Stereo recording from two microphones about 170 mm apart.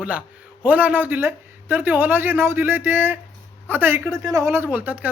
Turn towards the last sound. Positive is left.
turn(degrees=-10)  # may be behind; listen again after turning